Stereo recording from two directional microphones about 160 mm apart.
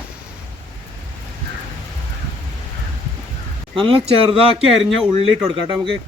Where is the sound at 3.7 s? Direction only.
35° right (ahead or behind).